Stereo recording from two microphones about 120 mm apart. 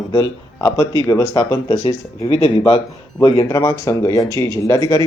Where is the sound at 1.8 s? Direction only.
55° left (ahead or behind).